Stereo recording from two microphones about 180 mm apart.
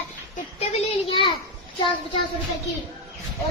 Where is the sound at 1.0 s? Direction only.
30° left (ahead or behind).